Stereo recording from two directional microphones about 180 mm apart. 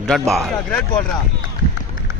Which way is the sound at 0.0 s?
Centre (ahead or behind).